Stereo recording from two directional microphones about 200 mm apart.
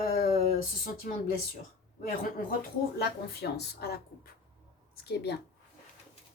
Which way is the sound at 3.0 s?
50° left (ahead or behind).